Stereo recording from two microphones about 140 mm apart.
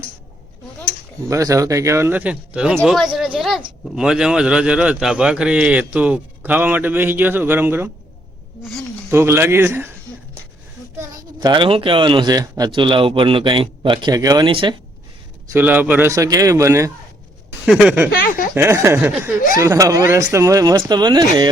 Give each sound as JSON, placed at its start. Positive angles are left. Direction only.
{"t": 1.3, "sound": "a man's voice", "side_deg": -25}
{"t": 9.0, "sound": "a man's voice", "side_deg": -15}
{"t": 11.3, "sound": "speech", "side_deg": -35}
{"t": 14.5, "sound": "speech", "side_deg": -40}
{"t": 15.5, "sound": "speech", "side_deg": -15}
{"t": 17.7, "sound": "a man's voice", "side_deg": -5}
{"t": 18.2, "sound": "a sound", "side_deg": 80}
{"t": 18.5, "sound": "a man's voice", "side_deg": -15}